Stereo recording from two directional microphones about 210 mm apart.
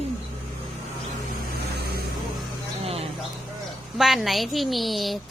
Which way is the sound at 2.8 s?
30° right (ahead or behind).